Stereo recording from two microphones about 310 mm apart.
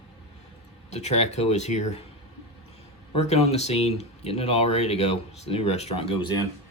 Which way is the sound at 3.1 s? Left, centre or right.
Centre.